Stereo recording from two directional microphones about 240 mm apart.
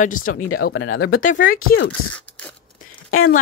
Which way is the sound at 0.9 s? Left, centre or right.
Left.